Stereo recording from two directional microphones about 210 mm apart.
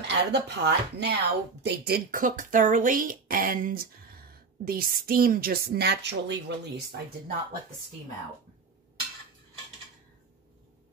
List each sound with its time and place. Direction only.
0.1 s speech: 55° right (ahead or behind)